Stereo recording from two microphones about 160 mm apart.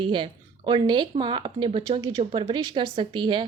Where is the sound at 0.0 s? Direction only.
30° right (ahead or behind).